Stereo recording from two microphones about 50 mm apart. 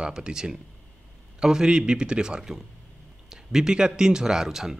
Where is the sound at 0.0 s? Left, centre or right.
Centre.